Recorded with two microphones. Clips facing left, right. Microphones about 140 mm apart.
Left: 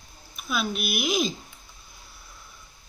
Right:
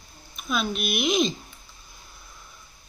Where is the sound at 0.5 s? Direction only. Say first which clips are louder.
Right 1 dB; 5° left (ahead or behind).